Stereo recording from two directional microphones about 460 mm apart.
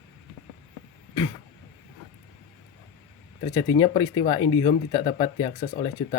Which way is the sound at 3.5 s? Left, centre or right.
Centre.